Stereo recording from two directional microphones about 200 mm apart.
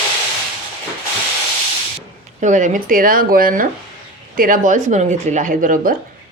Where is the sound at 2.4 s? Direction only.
40° right (ahead or behind).